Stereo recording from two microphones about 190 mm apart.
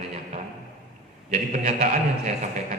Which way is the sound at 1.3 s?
35° right (ahead or behind).